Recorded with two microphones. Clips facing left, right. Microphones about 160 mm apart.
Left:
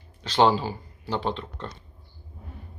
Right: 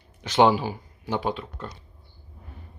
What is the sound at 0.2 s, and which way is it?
Speech, 15° right (ahead or behind).